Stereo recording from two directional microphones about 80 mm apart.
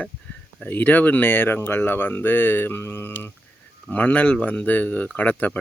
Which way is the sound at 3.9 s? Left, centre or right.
Centre.